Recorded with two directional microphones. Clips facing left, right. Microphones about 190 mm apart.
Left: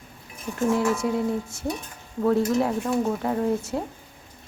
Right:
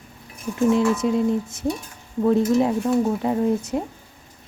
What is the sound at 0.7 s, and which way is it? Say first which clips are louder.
Speech: right 3 dB; 20° right (ahead or behind).